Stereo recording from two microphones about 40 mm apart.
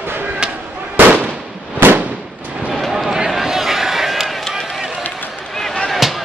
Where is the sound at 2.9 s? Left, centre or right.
Centre.